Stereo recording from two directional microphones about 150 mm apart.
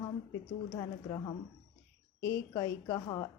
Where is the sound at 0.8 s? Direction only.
30° left (ahead or behind).